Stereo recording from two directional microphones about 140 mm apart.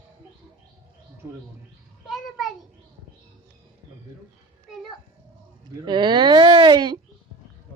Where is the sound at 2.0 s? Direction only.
Centre (ahead or behind).